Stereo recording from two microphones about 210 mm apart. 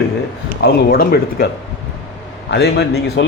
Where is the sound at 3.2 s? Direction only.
60° left (ahead or behind).